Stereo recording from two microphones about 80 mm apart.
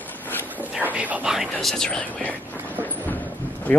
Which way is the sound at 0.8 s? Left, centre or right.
Right.